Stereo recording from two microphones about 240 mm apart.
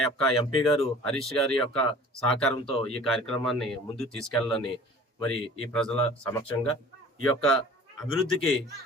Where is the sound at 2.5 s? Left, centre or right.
Left.